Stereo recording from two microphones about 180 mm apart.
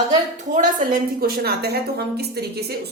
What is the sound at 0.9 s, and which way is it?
A woman's voice, 60° right (ahead or behind).